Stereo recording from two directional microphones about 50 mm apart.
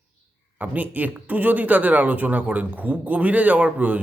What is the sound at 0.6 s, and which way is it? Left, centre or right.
A man's voice, right.